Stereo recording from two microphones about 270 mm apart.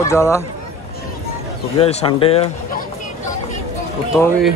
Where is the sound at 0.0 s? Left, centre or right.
Centre.